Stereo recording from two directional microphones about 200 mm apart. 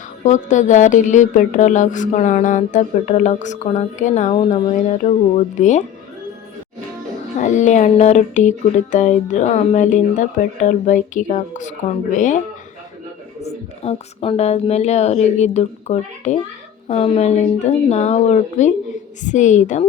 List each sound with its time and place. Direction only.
0.3 s speech: 40° left (ahead or behind)
7.3 s speech: 35° left (ahead or behind)
13.4 s speech: 30° left (ahead or behind)